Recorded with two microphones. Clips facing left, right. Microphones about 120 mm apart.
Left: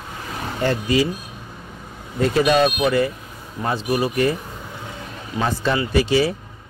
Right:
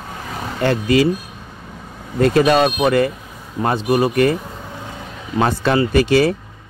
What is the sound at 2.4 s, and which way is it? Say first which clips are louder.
Speech: right 1 dB; 45° right (ahead or behind).